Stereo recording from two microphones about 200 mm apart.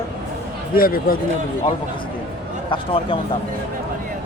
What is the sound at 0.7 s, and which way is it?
Speech, 45° left (ahead or behind).